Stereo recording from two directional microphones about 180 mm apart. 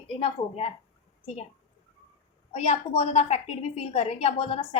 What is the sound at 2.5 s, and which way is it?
A woman's voice, 35° left (ahead or behind).